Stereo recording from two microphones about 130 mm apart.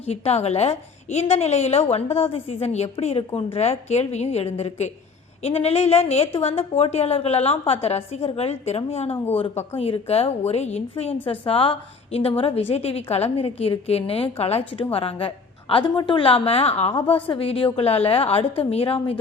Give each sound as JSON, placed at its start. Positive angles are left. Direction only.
{"t": 0.0, "sound": "a woman's voice", "side_deg": 55}